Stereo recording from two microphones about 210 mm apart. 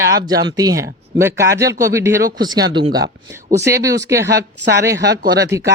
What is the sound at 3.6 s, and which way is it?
Speech, 15° right (ahead or behind).